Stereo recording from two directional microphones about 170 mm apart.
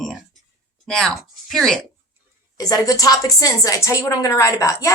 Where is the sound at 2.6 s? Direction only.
20° left (ahead or behind).